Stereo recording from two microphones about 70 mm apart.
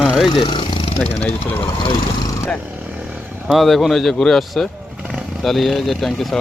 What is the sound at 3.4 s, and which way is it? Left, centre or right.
Speech, centre.